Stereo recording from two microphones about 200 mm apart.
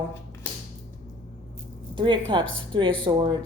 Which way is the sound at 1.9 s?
25° right (ahead or behind).